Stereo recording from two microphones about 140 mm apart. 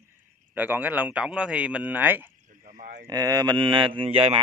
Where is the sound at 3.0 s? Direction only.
25° right (ahead or behind); by 4.4 s 45° right (ahead or behind).